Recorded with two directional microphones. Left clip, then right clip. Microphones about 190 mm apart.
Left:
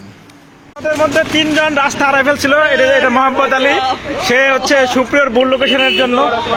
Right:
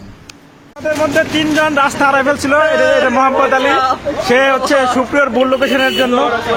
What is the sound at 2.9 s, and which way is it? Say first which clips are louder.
A man's voice: even; 20° left (ahead or behind).